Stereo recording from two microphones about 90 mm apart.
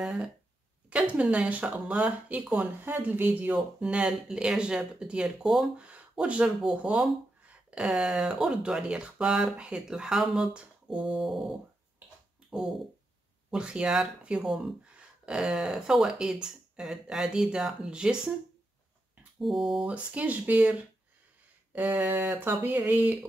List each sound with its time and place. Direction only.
0.0 s speech: 10° right (ahead or behind)
3.5 s speech: 10° right (ahead or behind)
19.4 s speech: centre (ahead or behind)
19.9 s speech: 15° right (ahead or behind)